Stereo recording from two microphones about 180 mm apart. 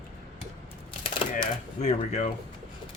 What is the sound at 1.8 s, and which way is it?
Speech, 40° left (ahead or behind).